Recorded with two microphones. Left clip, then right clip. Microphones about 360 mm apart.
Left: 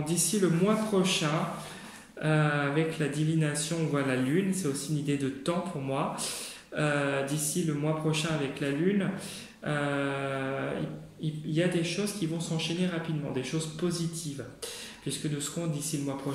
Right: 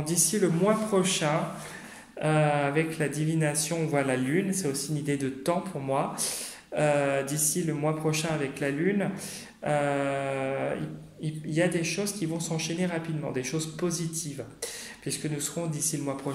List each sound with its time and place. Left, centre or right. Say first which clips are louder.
0.0 s speech: right 2 dB; centre
2.2 s speech: right 3 dB; centre
11.5 s speech: right 2 dB; centre
15.0 s speech: right 1 dB; centre